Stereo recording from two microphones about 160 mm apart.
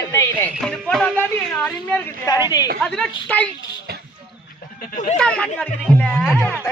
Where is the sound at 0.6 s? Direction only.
5° left (ahead or behind).